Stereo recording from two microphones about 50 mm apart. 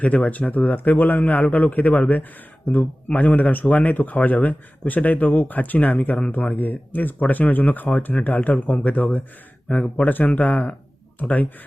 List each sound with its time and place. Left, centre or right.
0.0 s speech: left